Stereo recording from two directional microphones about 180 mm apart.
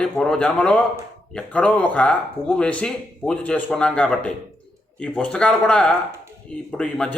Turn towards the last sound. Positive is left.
turn(degrees=5)  # may be behind; listen again after turning